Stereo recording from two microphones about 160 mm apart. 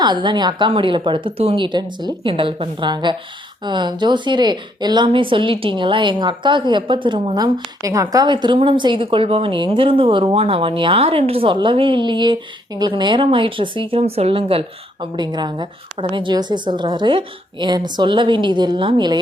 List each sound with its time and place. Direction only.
0.0 s a woman's voice: 30° right (ahead or behind)